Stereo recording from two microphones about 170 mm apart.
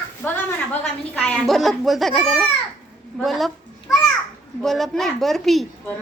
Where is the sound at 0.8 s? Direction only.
5° left (ahead or behind).